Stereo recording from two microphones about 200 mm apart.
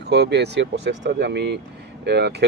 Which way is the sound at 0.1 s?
55° right (ahead or behind).